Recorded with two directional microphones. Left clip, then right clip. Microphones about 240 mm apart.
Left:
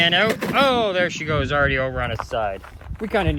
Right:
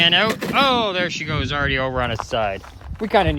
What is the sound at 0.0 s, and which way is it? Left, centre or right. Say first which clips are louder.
Speech: right 1 dB; centre.